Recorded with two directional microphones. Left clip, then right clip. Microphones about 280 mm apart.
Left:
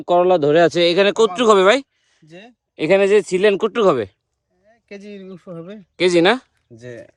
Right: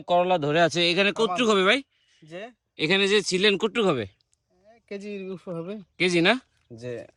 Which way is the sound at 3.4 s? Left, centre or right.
Centre.